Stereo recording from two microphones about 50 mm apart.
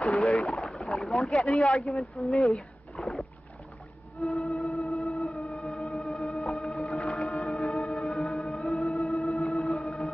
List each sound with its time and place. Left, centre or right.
0.0 s boat: centre
4.2 s music: centre
7.8 s music: centre
8.1 s music: centre